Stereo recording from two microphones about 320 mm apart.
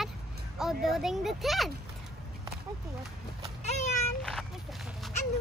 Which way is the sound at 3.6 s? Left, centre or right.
Left.